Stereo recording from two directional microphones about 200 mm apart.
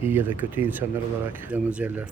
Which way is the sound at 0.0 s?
10° right (ahead or behind).